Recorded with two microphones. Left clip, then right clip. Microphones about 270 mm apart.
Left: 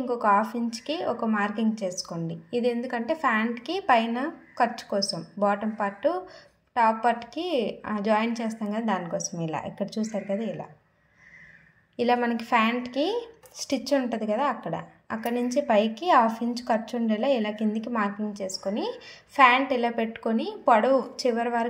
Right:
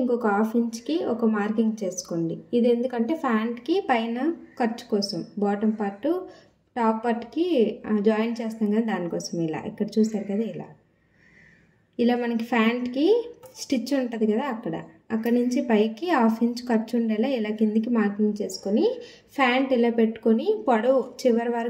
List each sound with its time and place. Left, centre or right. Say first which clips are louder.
0.8 s a woman's voice: even; left
2.9 s a woman's voice: left 1 dB; left
12.0 s a woman's voice: even; centre